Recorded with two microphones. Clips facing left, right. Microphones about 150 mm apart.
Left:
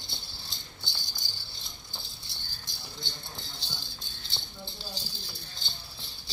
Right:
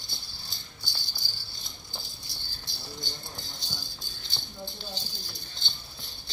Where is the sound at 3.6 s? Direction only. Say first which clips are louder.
Right 1 dB; 30° left (ahead or behind).